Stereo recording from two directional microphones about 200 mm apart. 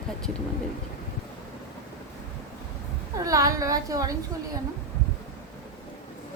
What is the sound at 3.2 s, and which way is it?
Speech, 15° right (ahead or behind).